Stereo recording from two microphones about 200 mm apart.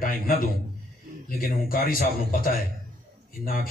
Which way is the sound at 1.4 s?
45° left (ahead or behind).